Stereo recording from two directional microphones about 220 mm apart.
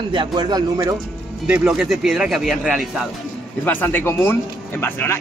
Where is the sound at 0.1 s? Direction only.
20° right (ahead or behind).